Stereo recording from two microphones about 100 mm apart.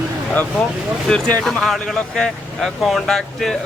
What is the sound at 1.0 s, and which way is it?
Speech, 10° left (ahead or behind).